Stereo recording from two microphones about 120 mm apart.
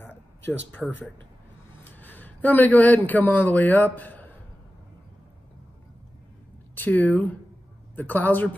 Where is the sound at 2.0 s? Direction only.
15° left (ahead or behind).